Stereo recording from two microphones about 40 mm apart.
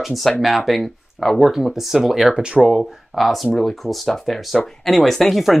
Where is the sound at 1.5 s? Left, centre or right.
Centre.